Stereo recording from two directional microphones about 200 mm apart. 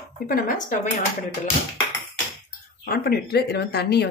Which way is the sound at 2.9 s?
50° left (ahead or behind).